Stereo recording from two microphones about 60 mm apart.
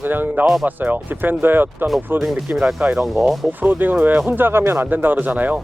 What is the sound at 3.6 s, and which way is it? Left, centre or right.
Speech, right.